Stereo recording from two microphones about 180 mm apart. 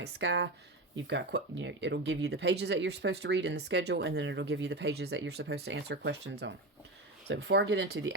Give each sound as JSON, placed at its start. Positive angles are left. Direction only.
{"t": 0.0, "sound": "speech", "side_deg": -80}